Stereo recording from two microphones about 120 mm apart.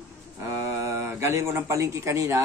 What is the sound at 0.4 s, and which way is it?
Speech, 25° right (ahead or behind).